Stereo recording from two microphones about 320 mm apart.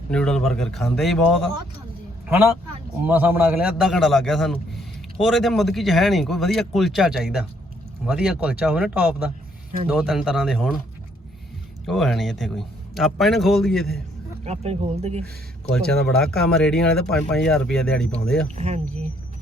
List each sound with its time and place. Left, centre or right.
0.1 s speech: centre
3.0 s speech: centre
11.9 s speech: centre
14.4 s speech: centre
15.7 s speech: centre
18.5 s speech: centre